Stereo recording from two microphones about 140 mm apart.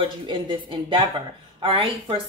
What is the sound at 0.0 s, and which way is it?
A woman's voice, 35° right (ahead or behind).